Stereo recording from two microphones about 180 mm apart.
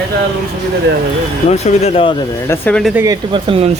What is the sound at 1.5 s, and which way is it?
Speech, 35° left (ahead or behind).